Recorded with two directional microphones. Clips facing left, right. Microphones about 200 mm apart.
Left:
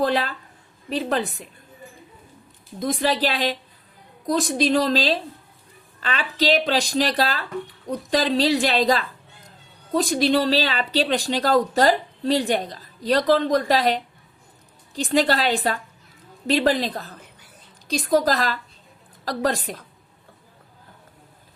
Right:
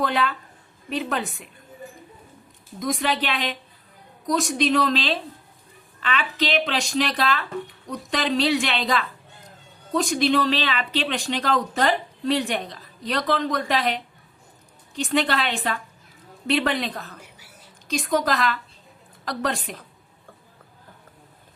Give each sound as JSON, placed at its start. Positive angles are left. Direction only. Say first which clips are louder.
{"t": 0.0, "sound": "speech", "louder": "left 2 dB", "side_deg": 35}
{"t": 2.7, "sound": "speech", "louder": "left 2 dB", "side_deg": 30}
{"t": 17.3, "sound": "whispering", "louder": "right 1 dB", "side_deg": -10}
{"t": 17.8, "sound": "speech", "louder": "left 3 dB", "side_deg": 35}